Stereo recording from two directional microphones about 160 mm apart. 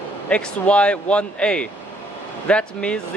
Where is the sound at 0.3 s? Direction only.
5° left (ahead or behind).